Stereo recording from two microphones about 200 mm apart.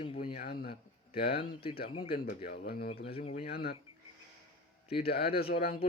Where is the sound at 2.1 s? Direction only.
45° left (ahead or behind).